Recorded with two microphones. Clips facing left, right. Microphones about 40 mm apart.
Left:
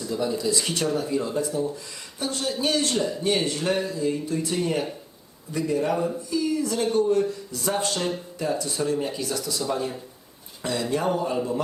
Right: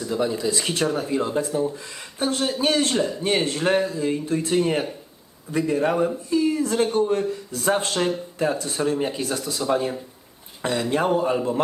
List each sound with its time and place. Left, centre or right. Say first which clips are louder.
0.0 s speech: right 2 dB; right